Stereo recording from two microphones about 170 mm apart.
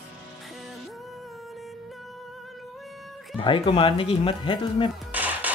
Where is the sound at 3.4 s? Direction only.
30° left (ahead or behind).